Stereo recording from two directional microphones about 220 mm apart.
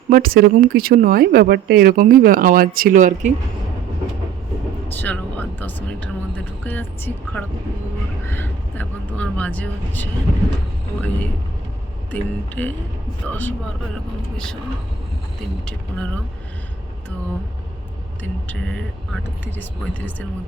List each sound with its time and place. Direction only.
0.1 s speech: 40° right (ahead or behind)
4.9 s speech: 10° left (ahead or behind)
12.1 s speech: 10° left (ahead or behind)
18.2 s speech: 5° left (ahead or behind)